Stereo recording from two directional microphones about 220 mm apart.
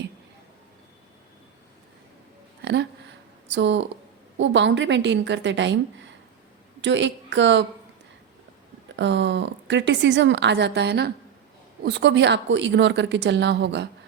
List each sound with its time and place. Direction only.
2.6 s a sound: 50° right (ahead or behind)
3.5 s a woman's voice: 55° right (ahead or behind)
9.0 s speech: 55° right (ahead or behind)